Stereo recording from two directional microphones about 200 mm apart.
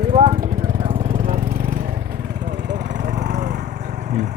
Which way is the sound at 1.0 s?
50° right (ahead or behind).